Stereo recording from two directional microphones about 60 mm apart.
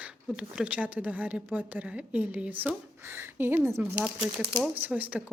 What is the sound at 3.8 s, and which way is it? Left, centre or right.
Speech, right.